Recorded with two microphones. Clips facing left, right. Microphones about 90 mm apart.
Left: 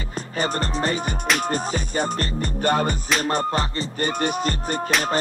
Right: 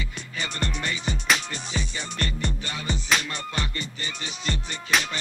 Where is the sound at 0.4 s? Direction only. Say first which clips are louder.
Left 7 dB; 40° left (ahead or behind).